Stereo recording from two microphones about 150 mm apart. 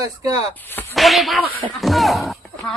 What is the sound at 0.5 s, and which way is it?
Speech, 15° left (ahead or behind).